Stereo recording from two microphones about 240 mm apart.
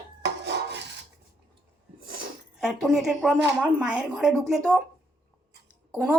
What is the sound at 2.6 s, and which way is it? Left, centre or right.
Speech, centre.